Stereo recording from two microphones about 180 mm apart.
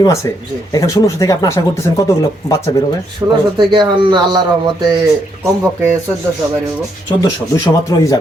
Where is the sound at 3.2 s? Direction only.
15° right (ahead or behind).